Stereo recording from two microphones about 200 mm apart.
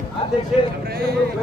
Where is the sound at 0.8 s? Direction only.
50° right (ahead or behind).